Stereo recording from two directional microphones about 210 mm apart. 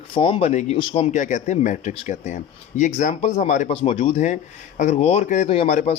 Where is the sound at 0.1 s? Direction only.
25° left (ahead or behind).